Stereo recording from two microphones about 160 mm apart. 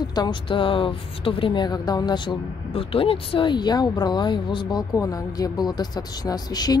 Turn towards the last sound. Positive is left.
turn(degrees=25)  # may be behind; listen again after turning